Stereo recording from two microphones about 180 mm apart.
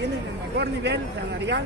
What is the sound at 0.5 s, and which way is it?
Speech, 70° right (ahead or behind).